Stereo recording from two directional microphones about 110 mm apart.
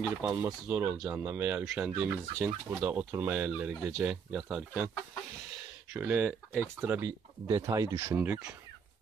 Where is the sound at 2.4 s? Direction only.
15° right (ahead or behind).